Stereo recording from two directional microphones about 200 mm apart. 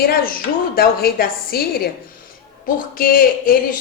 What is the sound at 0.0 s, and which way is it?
A woman's voice, 45° left (ahead or behind).